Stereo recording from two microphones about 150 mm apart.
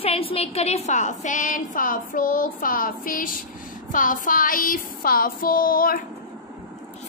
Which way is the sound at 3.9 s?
60° left (ahead or behind).